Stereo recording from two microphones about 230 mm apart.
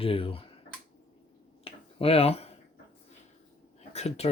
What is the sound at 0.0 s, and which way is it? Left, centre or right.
Speech, left.